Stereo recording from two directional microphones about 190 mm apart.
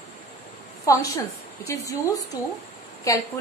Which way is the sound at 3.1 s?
15° left (ahead or behind).